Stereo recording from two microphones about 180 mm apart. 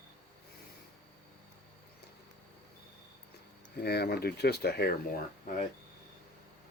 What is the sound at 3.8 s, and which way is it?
Speech, 65° left (ahead or behind).